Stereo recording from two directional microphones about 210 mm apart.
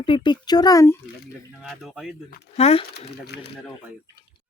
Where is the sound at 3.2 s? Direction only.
50° left (ahead or behind).